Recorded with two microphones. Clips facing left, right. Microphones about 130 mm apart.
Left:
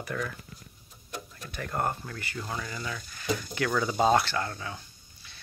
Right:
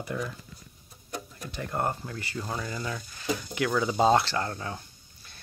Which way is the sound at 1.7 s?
20° right (ahead or behind).